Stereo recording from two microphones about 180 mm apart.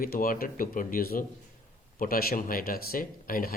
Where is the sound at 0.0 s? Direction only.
55° left (ahead or behind).